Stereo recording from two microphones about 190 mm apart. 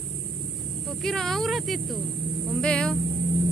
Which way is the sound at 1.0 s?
Centre (ahead or behind).